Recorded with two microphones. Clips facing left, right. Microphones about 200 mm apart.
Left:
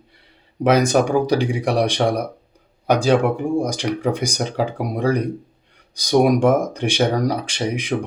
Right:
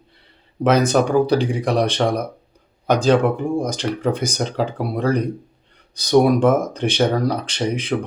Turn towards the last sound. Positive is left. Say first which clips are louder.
# right 1 dB
turn(degrees=15)  # may be behind; listen again after turning